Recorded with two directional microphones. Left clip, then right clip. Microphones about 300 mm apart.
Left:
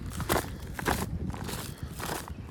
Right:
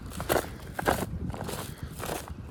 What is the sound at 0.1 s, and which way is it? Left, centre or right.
Walk, centre.